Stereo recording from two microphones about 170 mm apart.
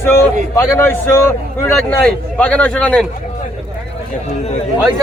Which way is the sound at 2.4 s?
10° left (ahead or behind).